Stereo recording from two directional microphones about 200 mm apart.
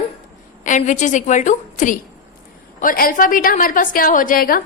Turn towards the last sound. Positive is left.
turn(degrees=45)  # may be behind; listen again after turning